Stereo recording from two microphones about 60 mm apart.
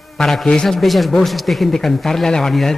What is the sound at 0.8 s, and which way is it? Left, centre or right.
Speech, centre.